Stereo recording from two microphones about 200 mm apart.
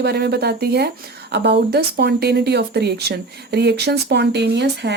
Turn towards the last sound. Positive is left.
turn(degrees=-60)  # may be behind; listen again after turning